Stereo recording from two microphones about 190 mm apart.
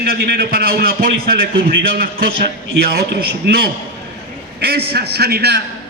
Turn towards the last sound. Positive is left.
turn(degrees=-60)  # may be behind; listen again after turning